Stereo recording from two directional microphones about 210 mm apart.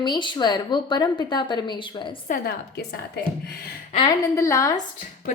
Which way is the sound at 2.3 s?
45° left (ahead or behind).